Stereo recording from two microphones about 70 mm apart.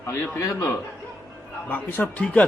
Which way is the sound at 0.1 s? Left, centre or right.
Left.